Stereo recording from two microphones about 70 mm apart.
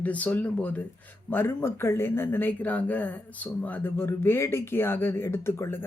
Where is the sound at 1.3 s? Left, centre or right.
Left.